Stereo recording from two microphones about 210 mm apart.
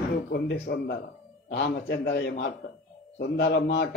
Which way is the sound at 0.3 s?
50° left (ahead or behind).